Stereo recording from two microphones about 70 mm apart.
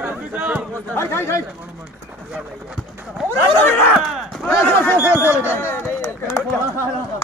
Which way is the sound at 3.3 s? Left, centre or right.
Left.